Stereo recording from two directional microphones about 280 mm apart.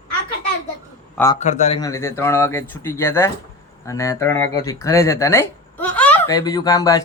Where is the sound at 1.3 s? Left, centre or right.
Left.